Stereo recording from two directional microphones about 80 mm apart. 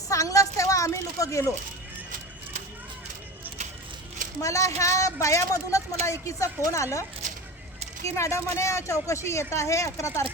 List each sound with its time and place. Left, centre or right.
0.1 s a sound: left
4.4 s a woman's voice: left
8.0 s a woman's voice: left